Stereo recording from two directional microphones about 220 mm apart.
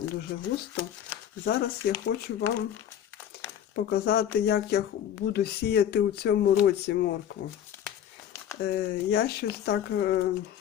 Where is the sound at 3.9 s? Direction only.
45° left (ahead or behind).